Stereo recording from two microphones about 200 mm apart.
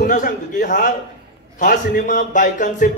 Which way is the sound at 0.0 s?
45° left (ahead or behind).